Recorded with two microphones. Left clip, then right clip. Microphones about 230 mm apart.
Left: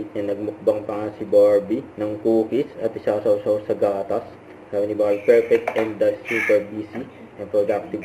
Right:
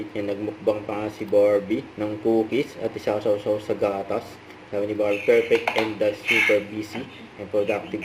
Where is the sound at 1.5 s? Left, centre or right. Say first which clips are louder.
Left 3 dB; right.